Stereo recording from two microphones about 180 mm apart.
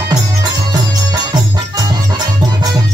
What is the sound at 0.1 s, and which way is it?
Music, 20° right (ahead or behind).